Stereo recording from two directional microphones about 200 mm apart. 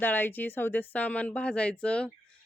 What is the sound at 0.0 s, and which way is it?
A man's voice, 10° left (ahead or behind).